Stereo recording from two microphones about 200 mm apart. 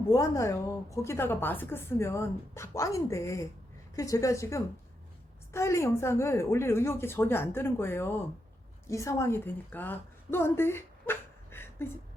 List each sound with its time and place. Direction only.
0.1 s a woman's voice: 15° left (ahead or behind)